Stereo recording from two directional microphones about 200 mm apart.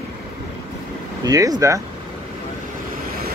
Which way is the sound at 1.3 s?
20° right (ahead or behind).